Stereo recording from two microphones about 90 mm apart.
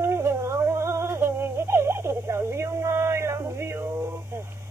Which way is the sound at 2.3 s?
30° right (ahead or behind).